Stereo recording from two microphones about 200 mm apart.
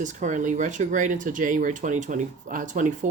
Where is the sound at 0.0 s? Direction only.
40° right (ahead or behind).